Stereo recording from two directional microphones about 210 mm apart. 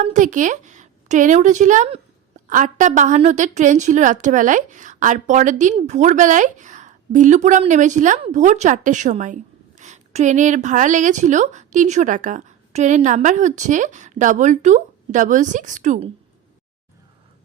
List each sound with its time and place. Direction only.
0.0 s a woman's voice: 35° right (ahead or behind)